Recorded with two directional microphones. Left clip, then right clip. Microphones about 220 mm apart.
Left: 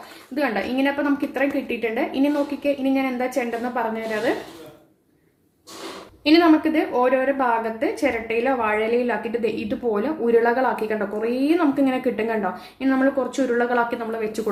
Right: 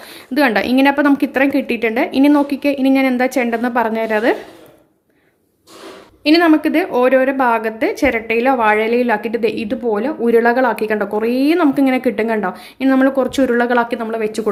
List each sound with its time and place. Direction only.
0.3 s a woman's voice: 45° right (ahead or behind)
6.2 s a woman's voice: 30° right (ahead or behind)